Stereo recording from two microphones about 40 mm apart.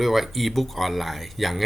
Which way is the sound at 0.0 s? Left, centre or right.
Centre.